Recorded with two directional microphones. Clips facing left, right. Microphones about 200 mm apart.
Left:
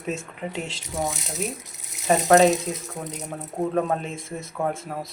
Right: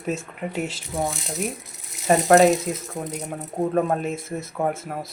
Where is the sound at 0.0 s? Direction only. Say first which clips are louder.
Right 2 dB; centre (ahead or behind).